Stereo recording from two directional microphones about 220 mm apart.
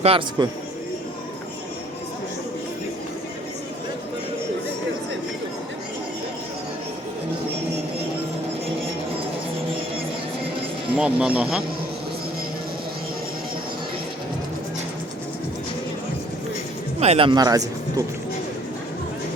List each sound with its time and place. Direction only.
0.0 s speech: 25° right (ahead or behind)
10.9 s speech: 5° right (ahead or behind)
17.0 s speech: 25° right (ahead or behind)